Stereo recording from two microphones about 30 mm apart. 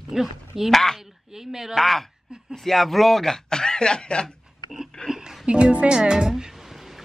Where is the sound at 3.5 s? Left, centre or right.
Left.